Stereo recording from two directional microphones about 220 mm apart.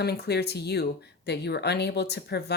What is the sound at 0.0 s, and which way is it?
Speech, 45° left (ahead or behind).